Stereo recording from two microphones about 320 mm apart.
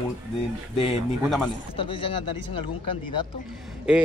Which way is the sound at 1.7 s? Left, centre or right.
Centre.